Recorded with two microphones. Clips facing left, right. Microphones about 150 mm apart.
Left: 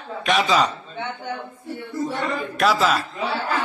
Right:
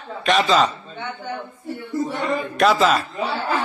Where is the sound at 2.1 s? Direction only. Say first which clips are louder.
Right 4 dB; 5° left (ahead or behind).